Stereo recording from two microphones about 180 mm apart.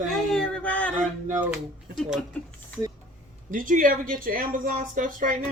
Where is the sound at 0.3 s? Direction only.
5° left (ahead or behind).